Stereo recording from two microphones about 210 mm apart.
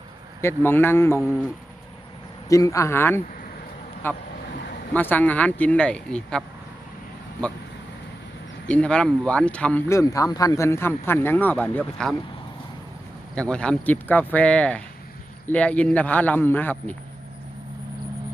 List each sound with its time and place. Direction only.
0.4 s speech: 10° left (ahead or behind)
1.2 s speech: centre (ahead or behind)
2.5 s speech: 15° left (ahead or behind)
8.6 s speech: 5° left (ahead or behind)
13.3 s speech: 5° left (ahead or behind)